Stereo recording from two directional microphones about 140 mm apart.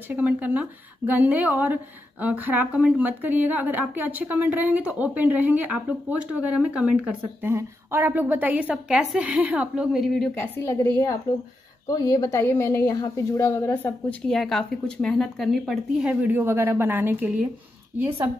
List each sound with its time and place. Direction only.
0.1 s speech: 10° right (ahead or behind)
7.4 s speech: 15° right (ahead or behind); by 10.3 s 5° left (ahead or behind)
10.4 s a woman's voice: 15° left (ahead or behind)
11.9 s a woman's voice: 25° left (ahead or behind)
14.2 s a woman's voice: 5° left (ahead or behind); by 18.3 s 20° right (ahead or behind)